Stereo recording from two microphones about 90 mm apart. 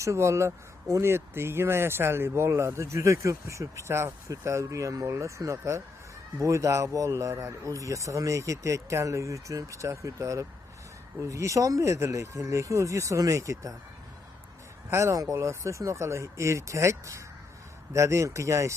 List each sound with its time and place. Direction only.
0.0 s speech: 35° right (ahead or behind)
14.8 s speech: 35° right (ahead or behind)